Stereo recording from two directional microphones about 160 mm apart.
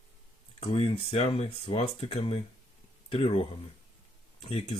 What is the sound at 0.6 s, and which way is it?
Speech, 40° left (ahead or behind).